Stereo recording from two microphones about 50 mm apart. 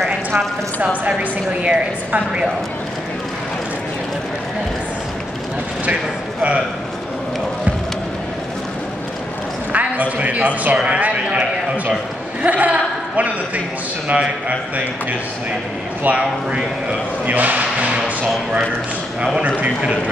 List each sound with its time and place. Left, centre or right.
1.6 s a woman's voice: right
9.7 s a man's voice: right
10.8 s a sound: right
12.4 s a man's voice: right
17.3 s a sound: right
19.4 s a woman's voice: right